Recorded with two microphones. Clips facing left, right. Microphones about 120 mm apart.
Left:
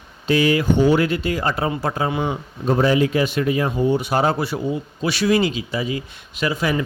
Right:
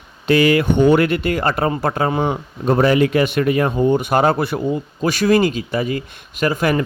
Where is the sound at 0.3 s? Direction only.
70° right (ahead or behind).